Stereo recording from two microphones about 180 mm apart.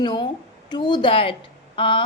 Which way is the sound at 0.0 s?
25° left (ahead or behind).